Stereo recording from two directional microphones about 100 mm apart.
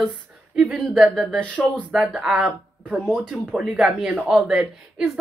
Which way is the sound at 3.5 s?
10° right (ahead or behind).